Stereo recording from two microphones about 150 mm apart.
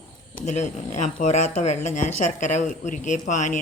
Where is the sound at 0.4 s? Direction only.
50° left (ahead or behind).